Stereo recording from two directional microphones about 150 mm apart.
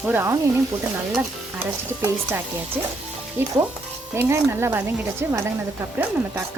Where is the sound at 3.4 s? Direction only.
15° right (ahead or behind).